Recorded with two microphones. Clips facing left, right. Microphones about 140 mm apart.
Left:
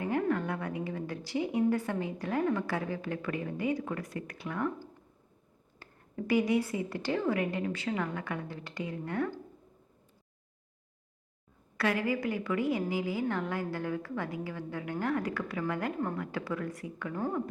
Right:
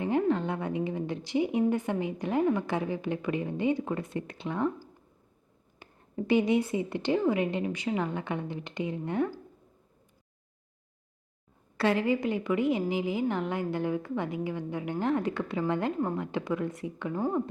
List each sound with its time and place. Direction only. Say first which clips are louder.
0.0 s a woman's voice: right 3 dB; 20° right (ahead or behind)
5.8 s a woman's voice: right 3 dB; 25° right (ahead or behind)
11.8 s a woman's voice: right 4 dB; 25° right (ahead or behind)